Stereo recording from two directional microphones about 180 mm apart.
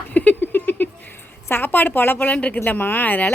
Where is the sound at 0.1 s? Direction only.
10° left (ahead or behind).